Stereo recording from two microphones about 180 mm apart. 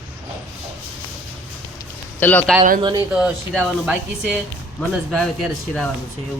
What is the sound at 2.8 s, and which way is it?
Speech, 25° right (ahead or behind).